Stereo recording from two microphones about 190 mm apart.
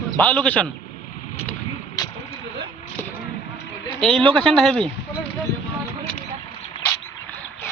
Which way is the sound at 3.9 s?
5° left (ahead or behind).